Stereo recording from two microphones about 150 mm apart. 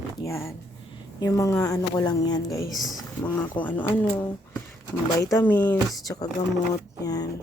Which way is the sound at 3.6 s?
10° left (ahead or behind).